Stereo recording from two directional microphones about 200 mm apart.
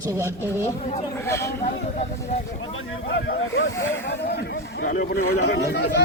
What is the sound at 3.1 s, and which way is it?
Speech, 70° left (ahead or behind).